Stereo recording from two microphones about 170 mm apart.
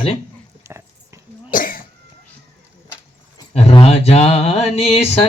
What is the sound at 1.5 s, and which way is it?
Cough, 55° left (ahead or behind).